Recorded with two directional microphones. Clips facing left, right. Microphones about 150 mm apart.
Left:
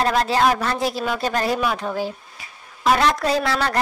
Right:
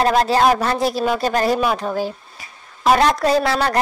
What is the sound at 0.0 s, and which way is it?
A woman's voice, 40° right (ahead or behind).